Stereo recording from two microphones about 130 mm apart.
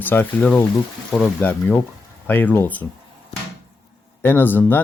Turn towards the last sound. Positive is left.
turn(degrees=15)  # may be behind; listen again after turning